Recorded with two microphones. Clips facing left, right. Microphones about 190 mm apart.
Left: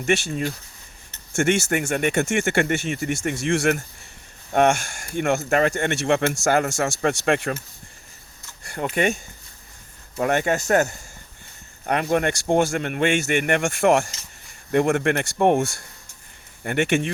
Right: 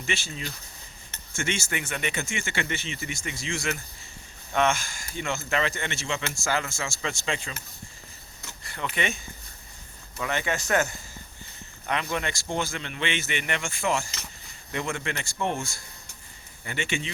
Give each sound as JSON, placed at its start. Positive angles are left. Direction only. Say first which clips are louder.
{"t": 0.0, "sound": "speech", "louder": "left 11 dB", "side_deg": 50}
{"t": 8.7, "sound": "speech", "louder": "left 8 dB", "side_deg": 45}
{"t": 16.6, "sound": "speech", "louder": "left 10 dB", "side_deg": 55}